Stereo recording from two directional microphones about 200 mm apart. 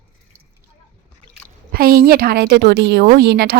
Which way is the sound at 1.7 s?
50° right (ahead or behind).